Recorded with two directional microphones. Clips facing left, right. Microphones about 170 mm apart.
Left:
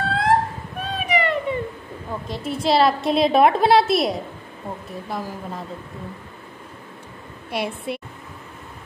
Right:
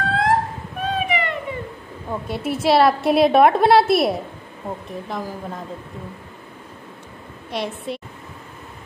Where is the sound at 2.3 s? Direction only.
5° right (ahead or behind).